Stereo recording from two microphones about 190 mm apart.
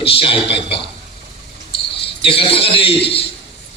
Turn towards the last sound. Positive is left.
turn(degrees=30)  # may be behind; listen again after turning